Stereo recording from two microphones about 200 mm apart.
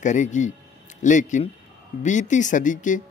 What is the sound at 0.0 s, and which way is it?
Speech, 35° left (ahead or behind).